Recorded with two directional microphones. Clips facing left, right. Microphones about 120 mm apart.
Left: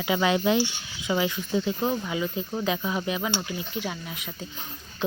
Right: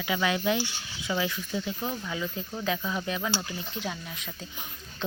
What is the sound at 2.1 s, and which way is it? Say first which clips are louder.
Speech: left 5 dB; 10° left (ahead or behind).